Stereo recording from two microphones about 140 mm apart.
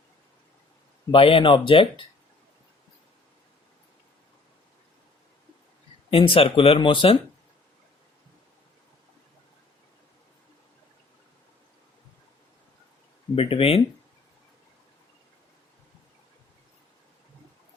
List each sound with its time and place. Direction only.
1.1 s speech: 40° left (ahead or behind)
6.1 s speech: 40° left (ahead or behind)
13.3 s speech: 40° left (ahead or behind)